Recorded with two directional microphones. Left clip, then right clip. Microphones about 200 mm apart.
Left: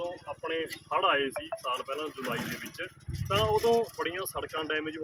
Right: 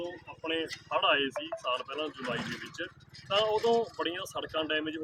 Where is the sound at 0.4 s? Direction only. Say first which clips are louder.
Even; 35° left (ahead or behind).